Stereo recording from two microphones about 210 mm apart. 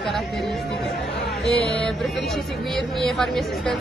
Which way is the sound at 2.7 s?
Centre (ahead or behind).